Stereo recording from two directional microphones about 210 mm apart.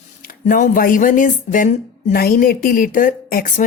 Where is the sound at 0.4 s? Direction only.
40° left (ahead or behind).